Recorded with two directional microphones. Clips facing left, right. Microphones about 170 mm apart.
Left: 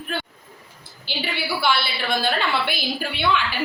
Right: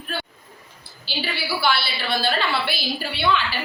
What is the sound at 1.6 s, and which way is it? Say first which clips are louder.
A woman's voice: left 1 dB; 20° left (ahead or behind).